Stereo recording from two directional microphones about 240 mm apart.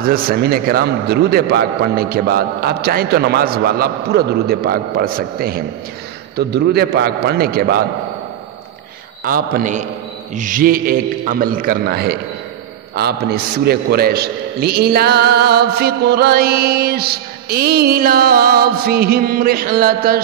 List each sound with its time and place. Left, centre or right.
0.0 s a man's voice: right
9.2 s a man's voice: right